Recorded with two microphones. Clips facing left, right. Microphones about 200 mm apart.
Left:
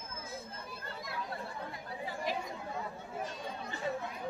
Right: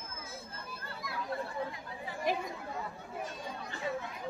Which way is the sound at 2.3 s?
55° right (ahead or behind).